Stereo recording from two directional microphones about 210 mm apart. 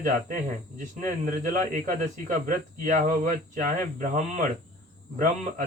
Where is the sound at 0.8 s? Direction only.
40° right (ahead or behind).